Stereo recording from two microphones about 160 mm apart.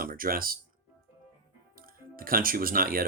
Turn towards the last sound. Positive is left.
turn(degrees=-65)  # may be behind; listen again after turning